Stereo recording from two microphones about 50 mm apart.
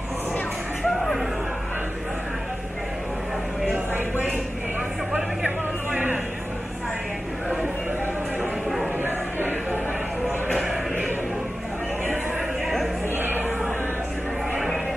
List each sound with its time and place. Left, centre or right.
0.8 s music: centre
9.0 s a sound: right
10.6 s music: centre